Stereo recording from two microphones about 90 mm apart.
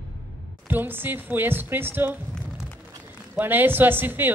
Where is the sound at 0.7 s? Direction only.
20° right (ahead or behind).